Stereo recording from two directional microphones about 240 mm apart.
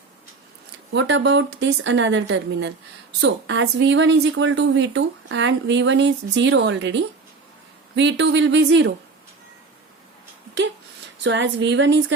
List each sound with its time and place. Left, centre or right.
0.9 s a woman's voice: right
11.2 s a woman's voice: right